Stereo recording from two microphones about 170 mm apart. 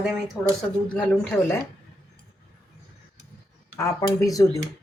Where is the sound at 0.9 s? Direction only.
5° left (ahead or behind).